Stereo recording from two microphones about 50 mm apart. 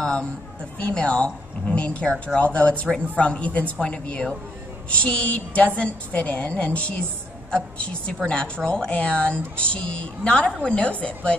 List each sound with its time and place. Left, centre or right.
0.0 s a woman's voice: centre